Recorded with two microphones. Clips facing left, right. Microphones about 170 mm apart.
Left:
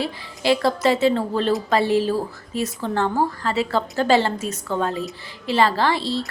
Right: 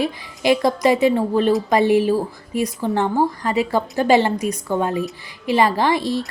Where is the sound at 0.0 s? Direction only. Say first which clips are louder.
Right 3 dB; 15° right (ahead or behind).